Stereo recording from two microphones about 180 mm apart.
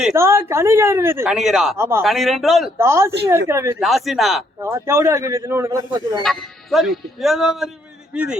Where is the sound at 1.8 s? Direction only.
15° right (ahead or behind).